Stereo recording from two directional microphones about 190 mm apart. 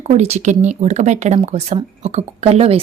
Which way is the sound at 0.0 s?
35° right (ahead or behind).